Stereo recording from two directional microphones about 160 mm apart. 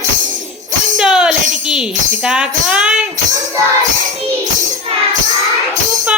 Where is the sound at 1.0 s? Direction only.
5° right (ahead or behind).